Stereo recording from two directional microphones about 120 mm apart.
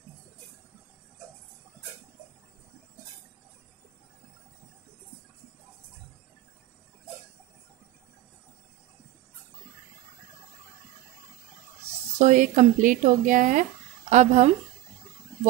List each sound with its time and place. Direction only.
12.2 s speech: 90° right; by 14.5 s 75° right (ahead or behind)